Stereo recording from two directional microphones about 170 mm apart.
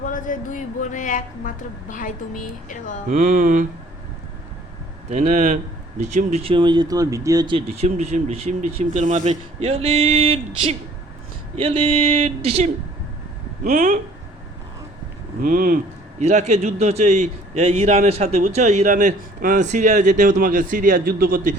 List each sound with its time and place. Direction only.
0.0 s speech: 50° left (ahead or behind)
3.1 s a man's voice: 50° right (ahead or behind)
5.0 s a man's voice: 40° right (ahead or behind); by 7.5 s 20° right (ahead or behind)
7.5 s a man's voice: 35° right (ahead or behind)
15.4 s a man's voice: 55° right (ahead or behind)